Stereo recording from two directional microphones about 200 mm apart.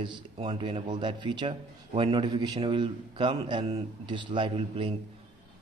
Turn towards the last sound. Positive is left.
turn(degrees=-25)  # may be behind; listen again after turning